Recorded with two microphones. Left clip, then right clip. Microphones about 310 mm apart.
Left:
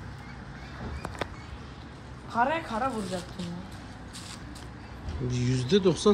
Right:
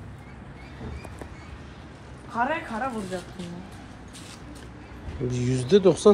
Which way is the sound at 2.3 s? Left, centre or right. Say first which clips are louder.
Even; left.